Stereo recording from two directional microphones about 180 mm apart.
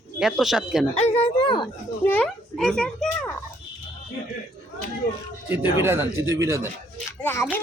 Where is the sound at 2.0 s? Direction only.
10° left (ahead or behind).